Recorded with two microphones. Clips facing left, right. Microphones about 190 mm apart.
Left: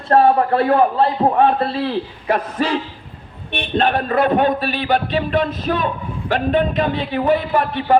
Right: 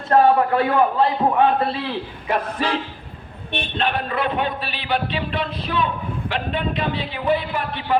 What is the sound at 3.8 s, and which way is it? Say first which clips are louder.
A man's voice: left 7 dB; 45° left (ahead or behind).